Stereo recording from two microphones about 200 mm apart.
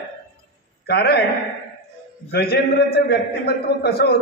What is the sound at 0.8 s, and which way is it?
Speech, 55° left (ahead or behind).